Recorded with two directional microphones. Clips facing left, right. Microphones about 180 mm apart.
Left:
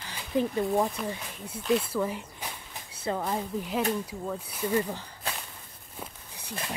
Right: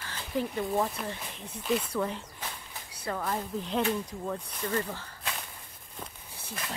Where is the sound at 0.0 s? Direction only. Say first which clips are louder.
Left 4 dB; 15° left (ahead or behind).